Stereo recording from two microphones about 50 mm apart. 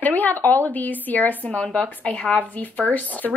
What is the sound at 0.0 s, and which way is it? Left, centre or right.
A woman's voice, left.